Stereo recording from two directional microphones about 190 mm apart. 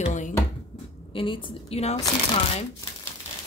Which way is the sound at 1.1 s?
25° left (ahead or behind).